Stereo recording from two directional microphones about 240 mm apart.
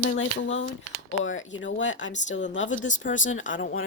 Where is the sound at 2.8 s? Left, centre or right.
Left.